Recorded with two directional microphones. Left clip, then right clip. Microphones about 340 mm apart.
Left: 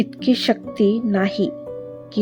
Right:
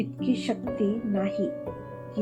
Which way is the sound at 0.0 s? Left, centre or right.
Left.